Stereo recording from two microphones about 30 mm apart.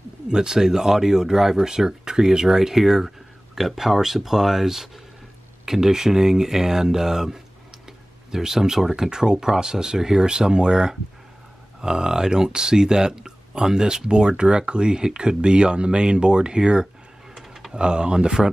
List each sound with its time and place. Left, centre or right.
0.3 s speech: right
17.4 s computer keyboard: centre
17.7 s speech: right